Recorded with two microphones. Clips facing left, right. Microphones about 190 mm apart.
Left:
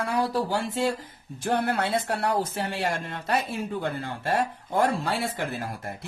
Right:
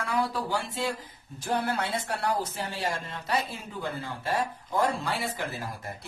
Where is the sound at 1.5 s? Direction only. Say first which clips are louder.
Left 4 dB; 60° left (ahead or behind).